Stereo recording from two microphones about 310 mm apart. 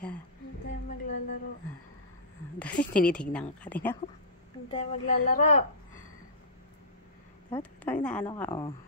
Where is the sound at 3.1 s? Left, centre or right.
Centre.